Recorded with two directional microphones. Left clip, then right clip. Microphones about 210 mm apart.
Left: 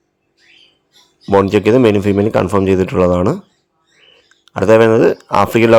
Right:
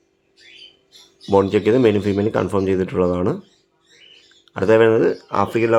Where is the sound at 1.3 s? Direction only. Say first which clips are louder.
Left 5 dB; 30° left (ahead or behind).